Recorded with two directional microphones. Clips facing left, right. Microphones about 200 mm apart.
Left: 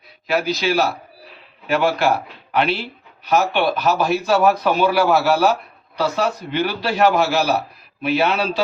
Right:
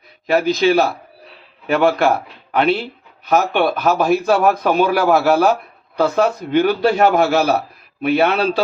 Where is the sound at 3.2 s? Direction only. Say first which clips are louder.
Right 2 dB; 50° right (ahead or behind).